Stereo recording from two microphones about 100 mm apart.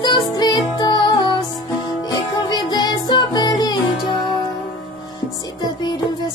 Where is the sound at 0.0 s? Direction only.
50° left (ahead or behind).